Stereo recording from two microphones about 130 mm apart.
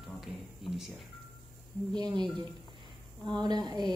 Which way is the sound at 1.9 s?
35° right (ahead or behind).